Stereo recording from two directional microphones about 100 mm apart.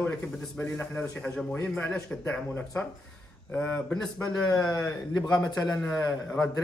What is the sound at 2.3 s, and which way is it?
Speech, 10° left (ahead or behind).